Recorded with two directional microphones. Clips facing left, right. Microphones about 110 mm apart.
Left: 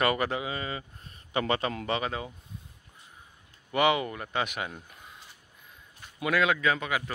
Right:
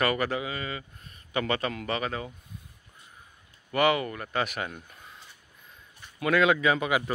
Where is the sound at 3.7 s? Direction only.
20° left (ahead or behind).